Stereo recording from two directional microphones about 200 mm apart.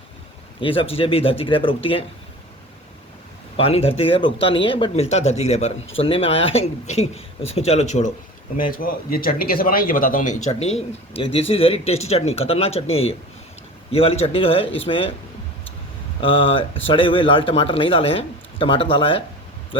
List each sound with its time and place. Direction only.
0.6 s speech: 25° left (ahead or behind)
3.6 s speech: 30° left (ahead or behind)
10.4 s speech: 30° left (ahead or behind)
16.2 s speech: 25° left (ahead or behind)